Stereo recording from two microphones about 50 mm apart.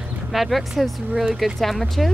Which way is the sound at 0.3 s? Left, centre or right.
Centre.